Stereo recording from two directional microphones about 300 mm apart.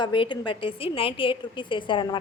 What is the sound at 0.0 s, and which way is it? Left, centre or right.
A woman's voice, centre.